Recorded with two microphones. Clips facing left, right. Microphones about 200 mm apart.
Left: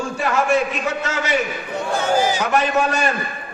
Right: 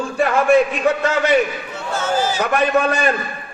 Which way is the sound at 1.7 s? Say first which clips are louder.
Left 2 dB; 15° left (ahead or behind).